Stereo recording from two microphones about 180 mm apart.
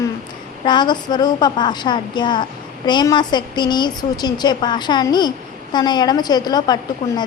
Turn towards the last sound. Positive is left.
turn(degrees=25)  # may be behind; listen again after turning